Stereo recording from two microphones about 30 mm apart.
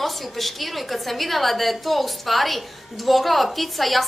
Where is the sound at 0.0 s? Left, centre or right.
Centre.